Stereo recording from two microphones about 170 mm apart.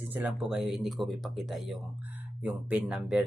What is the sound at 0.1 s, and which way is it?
Speech, 10° right (ahead or behind).